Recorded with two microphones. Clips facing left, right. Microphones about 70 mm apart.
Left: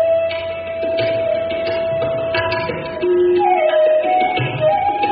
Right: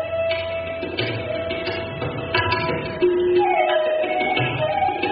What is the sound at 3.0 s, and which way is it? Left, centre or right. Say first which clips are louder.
Music: left 4 dB; centre.